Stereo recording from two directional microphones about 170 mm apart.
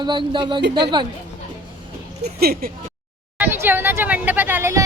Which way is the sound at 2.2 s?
65° right (ahead or behind).